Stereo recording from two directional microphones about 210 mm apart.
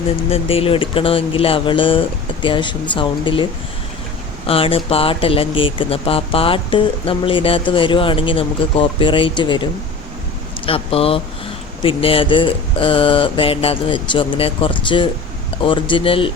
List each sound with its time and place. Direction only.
0.3 s speech: 25° left (ahead or behind)
4.4 s speech: 25° left (ahead or behind)
10.7 s speech: 25° left (ahead or behind)